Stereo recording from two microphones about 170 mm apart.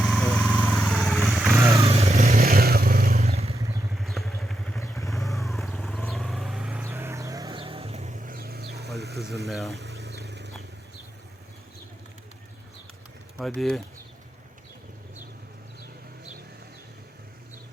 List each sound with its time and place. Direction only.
0.0 s vehicle: 5° left (ahead or behind)
1.9 s vehicle: 35° right (ahead or behind)
2.4 s vehicle: 65° right (ahead or behind)
3.2 s vehicle: 35° right (ahead or behind)
3.9 s vehicle: centre (ahead or behind)
6.8 s music: 15° right (ahead or behind)
7.6 s vehicle: 35° right (ahead or behind); by 8.9 s 75° right (ahead or behind)
9.0 s a sound: 75° right (ahead or behind)
9.5 s speech: centre (ahead or behind)
9.8 s vehicle: 75° right (ahead or behind)
13.4 s speech: centre (ahead or behind)